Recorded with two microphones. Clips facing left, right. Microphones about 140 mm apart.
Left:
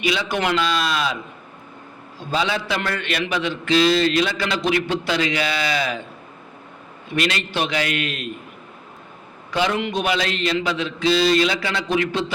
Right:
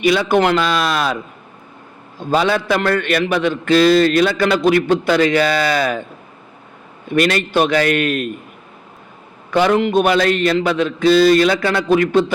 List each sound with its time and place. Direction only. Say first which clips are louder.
0.0 s a man's voice: right 8 dB; 50° right (ahead or behind)
2.3 s a man's voice: right 7 dB; 55° right (ahead or behind)
7.1 s a man's voice: right 8 dB; 50° right (ahead or behind)
9.5 s a man's voice: right 8 dB; 55° right (ahead or behind)